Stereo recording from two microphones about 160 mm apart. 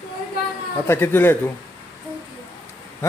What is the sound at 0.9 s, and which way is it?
Speech, 15° left (ahead or behind).